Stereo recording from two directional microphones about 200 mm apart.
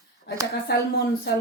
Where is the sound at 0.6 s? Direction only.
55° left (ahead or behind).